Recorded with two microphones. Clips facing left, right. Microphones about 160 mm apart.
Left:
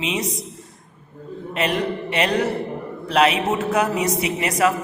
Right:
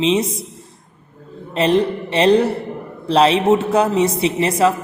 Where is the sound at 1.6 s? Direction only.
30° right (ahead or behind).